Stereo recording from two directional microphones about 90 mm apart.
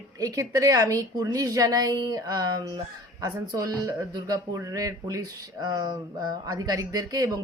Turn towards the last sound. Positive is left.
turn(degrees=-45)  # may be behind; listen again after turning